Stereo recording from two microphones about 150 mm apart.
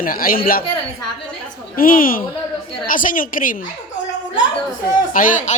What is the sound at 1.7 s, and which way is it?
A woman's voice, 70° left (ahead or behind).